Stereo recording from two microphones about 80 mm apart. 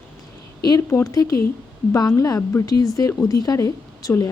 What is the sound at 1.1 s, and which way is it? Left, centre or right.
Speech, left.